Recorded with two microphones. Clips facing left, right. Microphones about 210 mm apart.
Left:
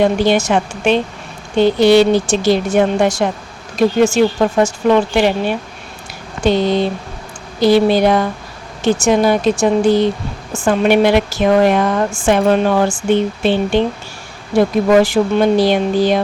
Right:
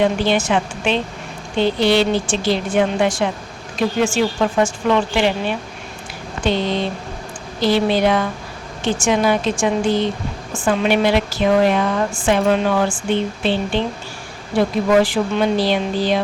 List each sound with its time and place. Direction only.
0.0 s a woman's voice: 45° left (ahead or behind)